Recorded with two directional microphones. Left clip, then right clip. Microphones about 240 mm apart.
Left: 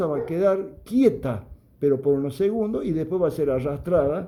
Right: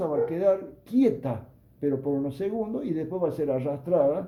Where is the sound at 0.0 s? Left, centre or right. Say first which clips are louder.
Left 2 dB; left.